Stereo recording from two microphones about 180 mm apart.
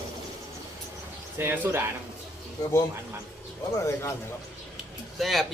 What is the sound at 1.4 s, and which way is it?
Speech, 10° right (ahead or behind).